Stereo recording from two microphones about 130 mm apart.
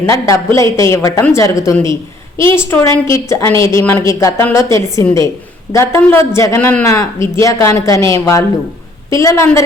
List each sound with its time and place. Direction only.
0.0 s a woman's voice: 25° left (ahead or behind)